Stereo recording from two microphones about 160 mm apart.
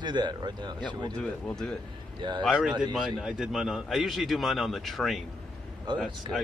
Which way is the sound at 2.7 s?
30° right (ahead or behind).